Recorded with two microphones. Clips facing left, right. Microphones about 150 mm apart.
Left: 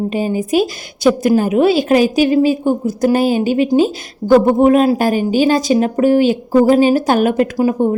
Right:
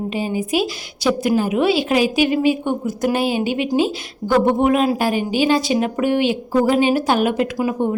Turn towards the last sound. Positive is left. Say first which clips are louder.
# left 5 dB
turn(degrees=40)  # may be behind; listen again after turning